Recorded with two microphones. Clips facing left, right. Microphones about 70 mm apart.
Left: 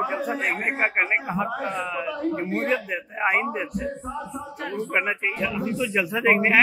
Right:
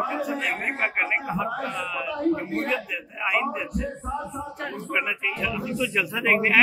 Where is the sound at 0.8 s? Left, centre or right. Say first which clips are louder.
Left 2 dB; left.